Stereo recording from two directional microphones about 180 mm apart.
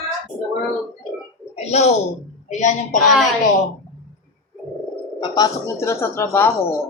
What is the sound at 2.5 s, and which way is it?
Speech, 40° left (ahead or behind).